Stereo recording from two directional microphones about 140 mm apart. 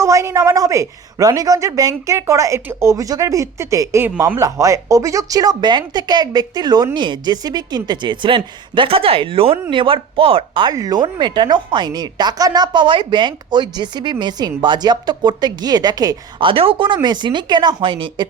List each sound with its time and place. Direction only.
0.0 s a woman's voice: 20° right (ahead or behind); by 18.3 s 35° right (ahead or behind)